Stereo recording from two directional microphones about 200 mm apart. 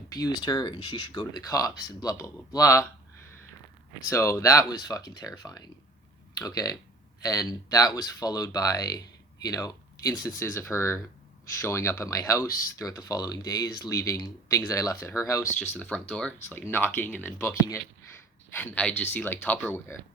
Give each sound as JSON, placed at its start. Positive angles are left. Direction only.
{"t": 0.1, "sound": "speech", "side_deg": 20}
{"t": 4.1, "sound": "speech", "side_deg": 15}
{"t": 18.5, "sound": "speech", "side_deg": 10}